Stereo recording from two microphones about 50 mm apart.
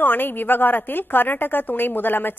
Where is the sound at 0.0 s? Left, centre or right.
Left.